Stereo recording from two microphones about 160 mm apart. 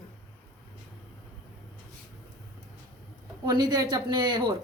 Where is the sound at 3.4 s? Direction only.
25° right (ahead or behind).